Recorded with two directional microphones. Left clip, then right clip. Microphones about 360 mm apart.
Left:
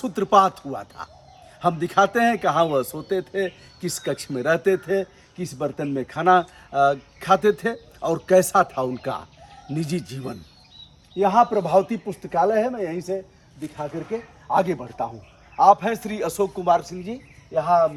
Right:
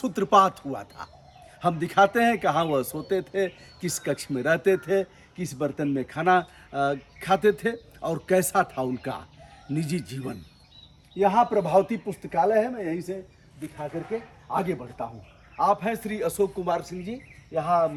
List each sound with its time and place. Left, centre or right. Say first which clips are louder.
0.0 s a man's voice: left 2 dB; centre
14.4 s a man's voice: left 8 dB; left